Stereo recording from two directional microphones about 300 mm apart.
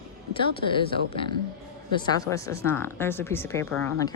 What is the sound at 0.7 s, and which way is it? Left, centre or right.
Speech, centre.